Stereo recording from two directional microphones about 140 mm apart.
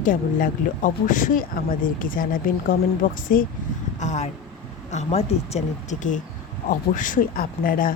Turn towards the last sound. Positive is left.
turn(degrees=85)